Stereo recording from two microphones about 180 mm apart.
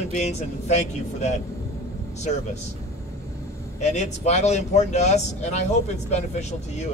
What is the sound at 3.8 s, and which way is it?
Speech, 40° left (ahead or behind).